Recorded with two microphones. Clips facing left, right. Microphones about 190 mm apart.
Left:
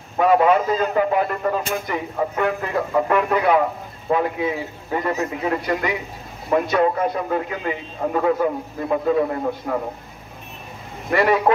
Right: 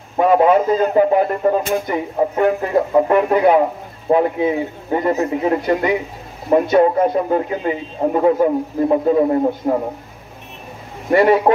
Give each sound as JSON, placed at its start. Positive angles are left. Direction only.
{"t": 0.2, "sound": "a man's voice", "side_deg": -30}
{"t": 11.1, "sound": "a man's voice", "side_deg": -35}